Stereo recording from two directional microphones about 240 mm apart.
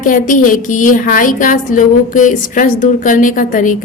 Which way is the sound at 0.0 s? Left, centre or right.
Left.